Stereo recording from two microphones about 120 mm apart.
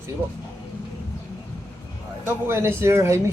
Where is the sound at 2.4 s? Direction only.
20° right (ahead or behind).